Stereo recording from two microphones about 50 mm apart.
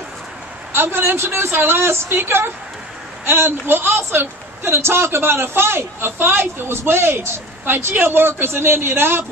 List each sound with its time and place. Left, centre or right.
0.7 s a man's voice: right